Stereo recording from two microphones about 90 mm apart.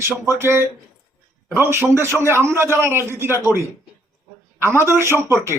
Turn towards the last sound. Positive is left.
turn(degrees=-30)  # may be behind; listen again after turning